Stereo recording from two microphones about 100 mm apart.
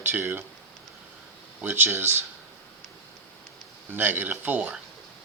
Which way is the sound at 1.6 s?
20° right (ahead or behind).